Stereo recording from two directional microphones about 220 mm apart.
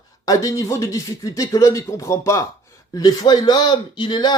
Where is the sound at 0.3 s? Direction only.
15° left (ahead or behind).